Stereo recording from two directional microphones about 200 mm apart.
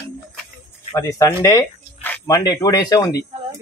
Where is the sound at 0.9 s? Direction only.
15° left (ahead or behind).